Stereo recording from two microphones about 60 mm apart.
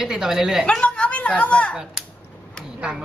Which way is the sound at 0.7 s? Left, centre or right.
Centre.